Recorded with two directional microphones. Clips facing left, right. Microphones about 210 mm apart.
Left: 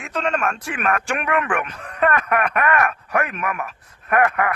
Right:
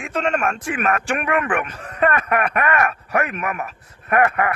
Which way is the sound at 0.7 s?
10° right (ahead or behind).